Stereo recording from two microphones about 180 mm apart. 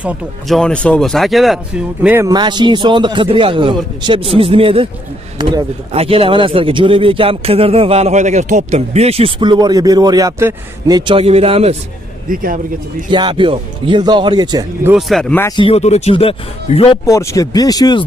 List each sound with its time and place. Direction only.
0.0 s speech: centre (ahead or behind)
2.0 s speech: 10° right (ahead or behind)
2.3 s a man's voice: 25° right (ahead or behind)
12.3 s speech: 50° right (ahead or behind)
13.1 s a man's voice: 25° right (ahead or behind)
15.0 s speech: centre (ahead or behind)
15.4 s speech: 25° left (ahead or behind)
17.0 s speech: 15° left (ahead or behind)